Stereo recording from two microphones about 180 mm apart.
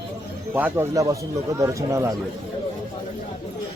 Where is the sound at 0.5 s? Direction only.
10° right (ahead or behind).